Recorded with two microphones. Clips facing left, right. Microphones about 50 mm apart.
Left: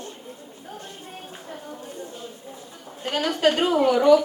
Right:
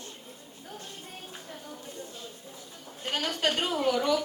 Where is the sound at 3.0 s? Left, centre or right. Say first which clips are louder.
Left 7 dB; centre.